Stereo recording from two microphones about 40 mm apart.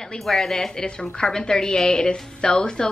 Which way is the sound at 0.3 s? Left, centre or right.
Centre.